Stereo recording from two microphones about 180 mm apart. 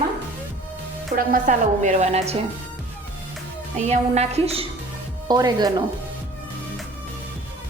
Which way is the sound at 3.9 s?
35° right (ahead or behind).